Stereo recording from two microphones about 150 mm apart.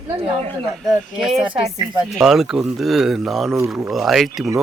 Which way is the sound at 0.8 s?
Centre (ahead or behind).